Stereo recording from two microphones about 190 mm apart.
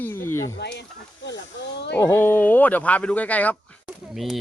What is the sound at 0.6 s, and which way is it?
Speech, 60° left (ahead or behind).